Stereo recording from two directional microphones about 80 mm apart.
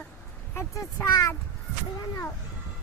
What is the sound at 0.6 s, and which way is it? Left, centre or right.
Speech, left.